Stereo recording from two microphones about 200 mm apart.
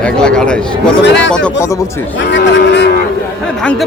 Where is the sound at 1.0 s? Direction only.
60° left (ahead or behind).